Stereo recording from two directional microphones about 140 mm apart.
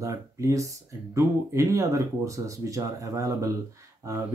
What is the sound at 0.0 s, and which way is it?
Speech, 20° right (ahead or behind).